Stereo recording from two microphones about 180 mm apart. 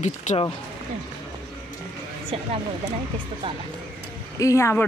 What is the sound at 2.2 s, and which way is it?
Speech, 35° right (ahead or behind).